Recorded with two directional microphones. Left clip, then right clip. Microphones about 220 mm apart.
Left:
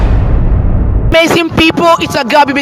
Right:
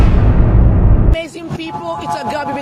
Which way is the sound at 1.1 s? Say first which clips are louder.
Left 16 dB; 50° left (ahead or behind).